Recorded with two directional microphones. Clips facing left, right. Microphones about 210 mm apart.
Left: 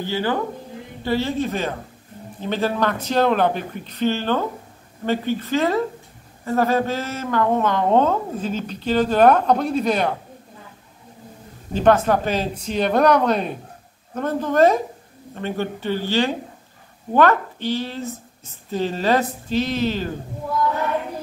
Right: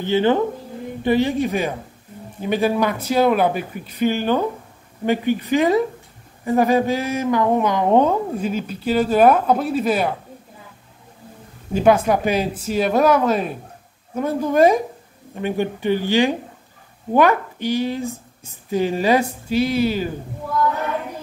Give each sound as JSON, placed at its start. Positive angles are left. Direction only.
{"t": 0.0, "sound": "speech", "side_deg": -20}
{"t": 11.7, "sound": "speech", "side_deg": -10}